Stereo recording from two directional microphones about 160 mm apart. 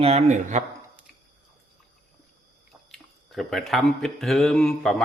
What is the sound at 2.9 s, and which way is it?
Speech, centre (ahead or behind).